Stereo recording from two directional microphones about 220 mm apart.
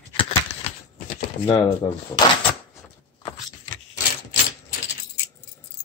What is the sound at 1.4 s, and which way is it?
Speech, 20° left (ahead or behind).